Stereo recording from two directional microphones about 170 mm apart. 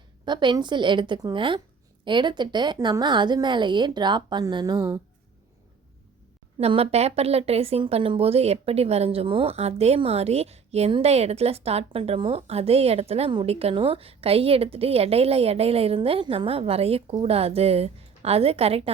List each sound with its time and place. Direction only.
0.3 s a woman's voice: 25° right (ahead or behind)
6.6 s a woman's voice: 35° right (ahead or behind)